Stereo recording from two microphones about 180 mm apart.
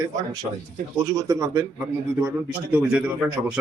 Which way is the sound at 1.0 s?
15° right (ahead or behind).